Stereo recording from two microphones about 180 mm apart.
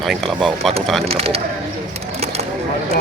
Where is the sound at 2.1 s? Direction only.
35° right (ahead or behind).